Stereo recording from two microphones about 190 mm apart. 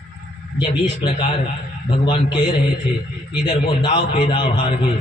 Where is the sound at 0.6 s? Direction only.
30° left (ahead or behind).